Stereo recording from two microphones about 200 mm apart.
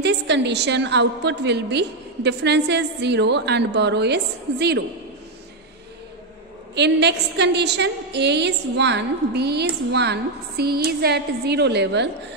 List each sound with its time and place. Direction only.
0.0 s a woman's voice: 60° right (ahead or behind)
6.7 s a woman's voice: 60° right (ahead or behind)